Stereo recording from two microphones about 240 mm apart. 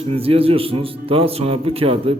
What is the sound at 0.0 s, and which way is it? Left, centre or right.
Speech, right.